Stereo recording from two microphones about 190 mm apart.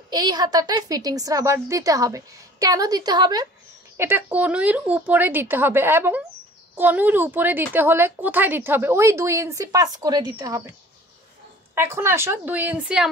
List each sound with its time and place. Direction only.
0.1 s a woman's voice: 20° right (ahead or behind)
11.7 s a woman's voice: 15° right (ahead or behind)